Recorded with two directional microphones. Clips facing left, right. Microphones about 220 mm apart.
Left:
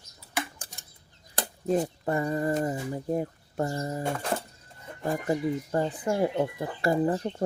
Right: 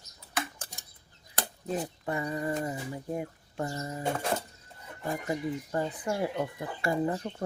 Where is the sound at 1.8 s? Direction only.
40° left (ahead or behind).